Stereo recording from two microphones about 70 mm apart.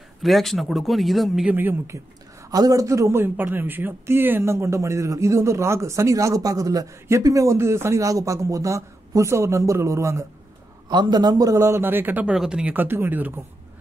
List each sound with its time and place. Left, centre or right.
0.2 s speech: centre
1.5 s speech: right
2.5 s a man's voice: right
3.2 s speech: right
10.9 s a man's voice: right
11.7 s speech: right
12.3 s speech: centre
12.7 s speech: right